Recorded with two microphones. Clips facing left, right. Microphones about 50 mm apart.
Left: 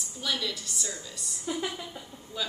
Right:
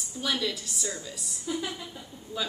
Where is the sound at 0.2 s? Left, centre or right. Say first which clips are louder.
Right 2 dB; centre.